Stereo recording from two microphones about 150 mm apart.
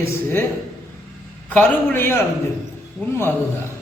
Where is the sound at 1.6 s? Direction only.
15° left (ahead or behind).